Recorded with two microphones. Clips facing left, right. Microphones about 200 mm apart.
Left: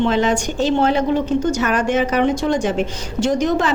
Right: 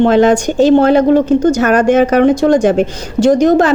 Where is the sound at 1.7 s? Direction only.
45° right (ahead or behind).